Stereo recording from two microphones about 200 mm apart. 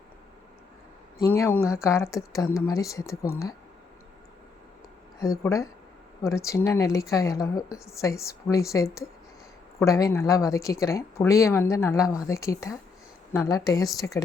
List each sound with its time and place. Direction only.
1.2 s speech: 10° left (ahead or behind)
5.2 s speech: 15° left (ahead or behind)